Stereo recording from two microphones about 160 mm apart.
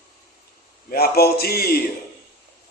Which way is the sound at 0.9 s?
75° left (ahead or behind).